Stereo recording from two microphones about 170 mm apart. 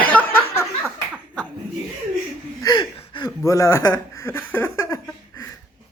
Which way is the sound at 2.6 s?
25° left (ahead or behind).